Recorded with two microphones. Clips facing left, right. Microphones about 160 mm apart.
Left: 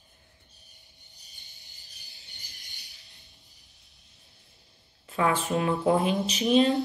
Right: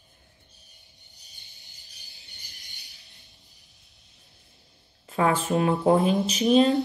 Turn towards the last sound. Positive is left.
turn(degrees=-40)  # may be behind; listen again after turning